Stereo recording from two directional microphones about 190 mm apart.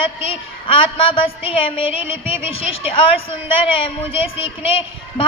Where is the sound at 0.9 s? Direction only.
30° left (ahead or behind).